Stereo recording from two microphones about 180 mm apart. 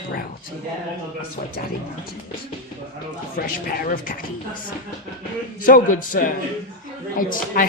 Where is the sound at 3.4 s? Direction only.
55° left (ahead or behind).